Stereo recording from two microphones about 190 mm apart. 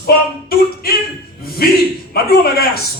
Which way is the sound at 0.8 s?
55° left (ahead or behind).